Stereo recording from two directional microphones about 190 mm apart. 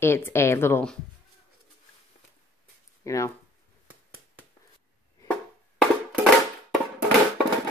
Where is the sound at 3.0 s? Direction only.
15° left (ahead or behind).